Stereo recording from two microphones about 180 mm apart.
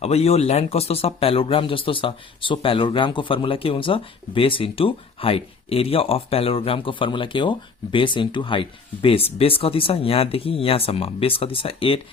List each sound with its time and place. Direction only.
0.0 s speech: 35° left (ahead or behind)